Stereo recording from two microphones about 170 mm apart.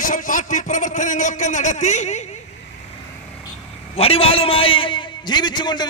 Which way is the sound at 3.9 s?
35° left (ahead or behind).